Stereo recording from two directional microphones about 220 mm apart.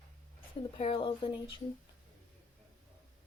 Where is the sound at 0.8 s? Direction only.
25° left (ahead or behind).